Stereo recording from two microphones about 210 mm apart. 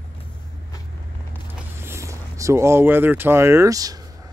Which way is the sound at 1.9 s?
15° right (ahead or behind).